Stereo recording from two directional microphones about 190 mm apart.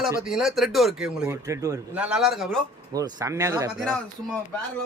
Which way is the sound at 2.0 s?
5° right (ahead or behind).